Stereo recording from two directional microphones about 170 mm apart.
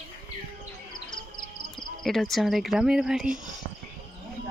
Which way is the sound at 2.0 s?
Centre (ahead or behind).